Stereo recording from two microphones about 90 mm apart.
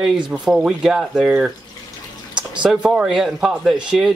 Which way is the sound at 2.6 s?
10° right (ahead or behind).